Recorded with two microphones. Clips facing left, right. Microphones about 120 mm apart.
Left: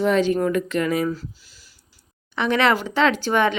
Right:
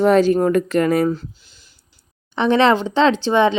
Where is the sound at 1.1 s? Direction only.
25° right (ahead or behind).